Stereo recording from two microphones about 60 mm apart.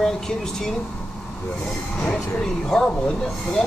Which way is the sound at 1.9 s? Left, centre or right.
Left.